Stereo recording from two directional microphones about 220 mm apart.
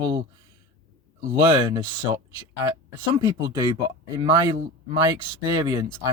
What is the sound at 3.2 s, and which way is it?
Speech, 15° right (ahead or behind).